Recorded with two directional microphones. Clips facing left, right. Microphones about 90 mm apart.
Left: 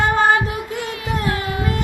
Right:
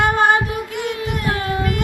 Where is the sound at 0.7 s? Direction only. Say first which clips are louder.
Right 1 dB; 35° left (ahead or behind).